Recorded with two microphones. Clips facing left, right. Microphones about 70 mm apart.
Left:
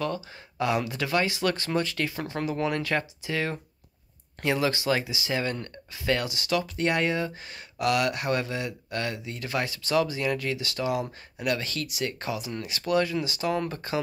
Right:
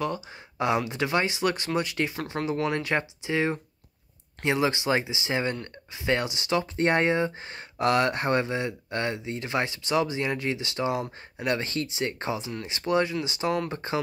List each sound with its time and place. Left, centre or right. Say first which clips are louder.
0.0 s speech: even; right